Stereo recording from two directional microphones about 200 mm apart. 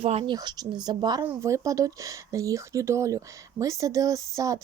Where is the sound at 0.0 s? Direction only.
30° right (ahead or behind).